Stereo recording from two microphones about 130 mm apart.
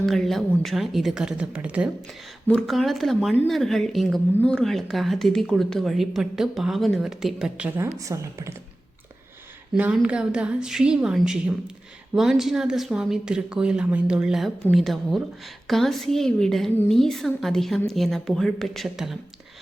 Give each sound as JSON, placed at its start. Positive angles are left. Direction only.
{"t": 0.0, "sound": "speech", "side_deg": 0}
{"t": 2.5, "sound": "speech", "side_deg": 5}
{"t": 7.9, "sound": "speech", "side_deg": -25}
{"t": 9.7, "sound": "a woman's voice", "side_deg": -10}